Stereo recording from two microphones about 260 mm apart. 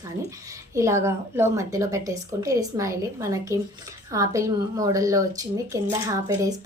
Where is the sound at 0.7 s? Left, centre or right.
Centre.